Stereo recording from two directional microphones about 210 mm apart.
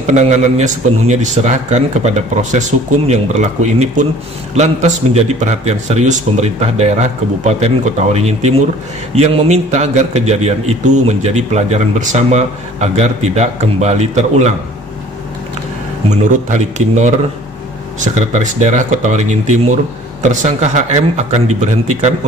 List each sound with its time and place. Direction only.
0.0 s a man's voice: 35° right (ahead or behind)
16.1 s a man's voice: 35° right (ahead or behind)